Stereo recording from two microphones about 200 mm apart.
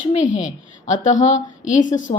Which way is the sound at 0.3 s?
35° left (ahead or behind).